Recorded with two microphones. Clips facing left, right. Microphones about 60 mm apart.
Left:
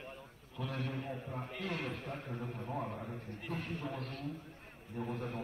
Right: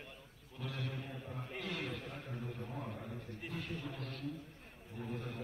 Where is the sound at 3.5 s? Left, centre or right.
Left.